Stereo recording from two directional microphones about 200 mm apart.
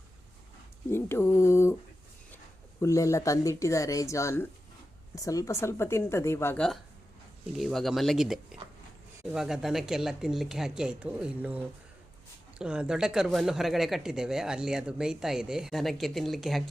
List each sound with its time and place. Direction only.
0.9 s speech: 10° left (ahead or behind)
2.8 s speech: 15° left (ahead or behind); by 16.6 s centre (ahead or behind)